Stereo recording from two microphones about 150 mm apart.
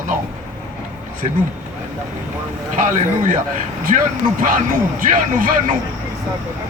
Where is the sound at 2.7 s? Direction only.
60° right (ahead or behind).